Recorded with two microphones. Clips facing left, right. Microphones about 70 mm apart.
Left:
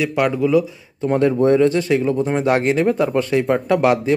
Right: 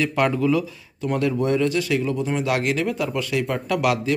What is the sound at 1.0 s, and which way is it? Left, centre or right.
Speech, left.